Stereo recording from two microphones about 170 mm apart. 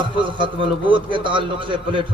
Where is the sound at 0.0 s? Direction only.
30° right (ahead or behind).